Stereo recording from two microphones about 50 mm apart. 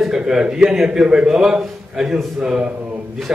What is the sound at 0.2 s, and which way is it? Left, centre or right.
A man's voice, centre.